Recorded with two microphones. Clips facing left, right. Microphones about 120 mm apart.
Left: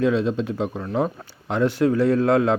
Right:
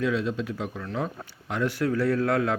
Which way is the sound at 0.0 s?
25° left (ahead or behind).